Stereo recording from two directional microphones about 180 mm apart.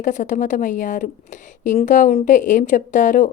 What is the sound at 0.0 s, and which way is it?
A woman's voice, 45° left (ahead or behind).